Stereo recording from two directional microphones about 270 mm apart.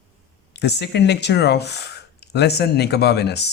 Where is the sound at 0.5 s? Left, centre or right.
Left.